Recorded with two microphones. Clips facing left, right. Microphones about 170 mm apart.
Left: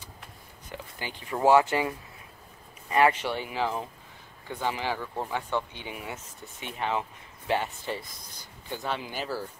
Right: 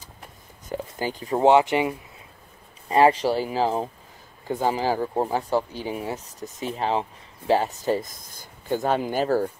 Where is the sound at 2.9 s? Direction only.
35° right (ahead or behind); by 9.5 s 50° right (ahead or behind).